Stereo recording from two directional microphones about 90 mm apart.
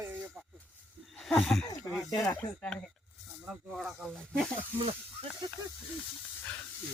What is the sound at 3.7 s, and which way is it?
Speech, centre (ahead or behind).